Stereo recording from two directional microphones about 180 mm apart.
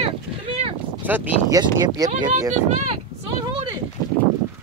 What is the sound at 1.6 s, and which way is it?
Speech, 20° right (ahead or behind).